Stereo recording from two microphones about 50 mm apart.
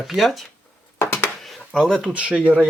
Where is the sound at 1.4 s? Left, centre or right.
Centre.